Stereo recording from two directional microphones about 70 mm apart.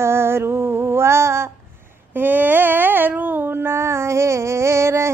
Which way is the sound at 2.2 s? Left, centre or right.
Right.